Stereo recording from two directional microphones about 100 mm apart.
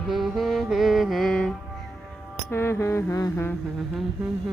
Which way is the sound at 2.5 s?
25° left (ahead or behind).